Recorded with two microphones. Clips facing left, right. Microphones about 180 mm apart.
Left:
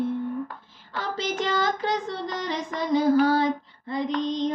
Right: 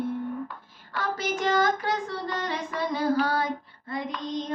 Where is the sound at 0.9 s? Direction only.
25° left (ahead or behind).